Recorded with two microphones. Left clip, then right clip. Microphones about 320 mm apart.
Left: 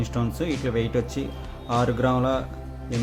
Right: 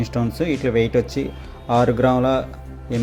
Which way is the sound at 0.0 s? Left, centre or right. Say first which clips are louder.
Right 5 dB; centre.